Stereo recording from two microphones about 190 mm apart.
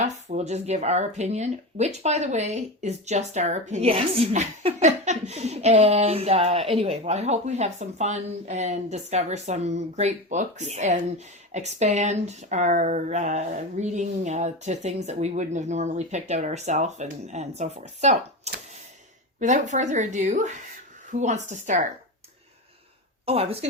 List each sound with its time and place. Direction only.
0.0 s speech: 35° right (ahead or behind)
23.2 s speech: 30° right (ahead or behind)